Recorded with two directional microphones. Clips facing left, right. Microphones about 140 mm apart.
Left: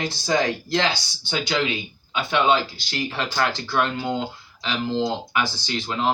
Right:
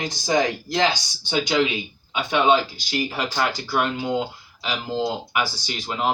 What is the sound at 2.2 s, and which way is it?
Speech, 15° right (ahead or behind).